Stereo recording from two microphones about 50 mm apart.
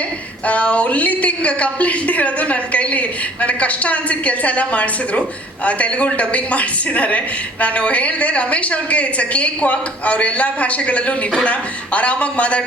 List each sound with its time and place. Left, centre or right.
0.4 s a woman's voice: left